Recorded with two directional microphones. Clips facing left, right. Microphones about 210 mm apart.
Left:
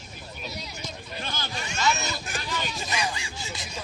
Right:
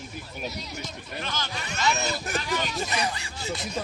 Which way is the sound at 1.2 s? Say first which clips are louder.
Right 2 dB; 30° left (ahead or behind).